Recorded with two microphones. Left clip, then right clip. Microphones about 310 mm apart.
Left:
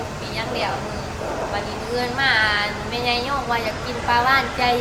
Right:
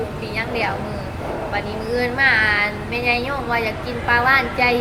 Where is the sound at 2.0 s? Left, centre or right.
Centre.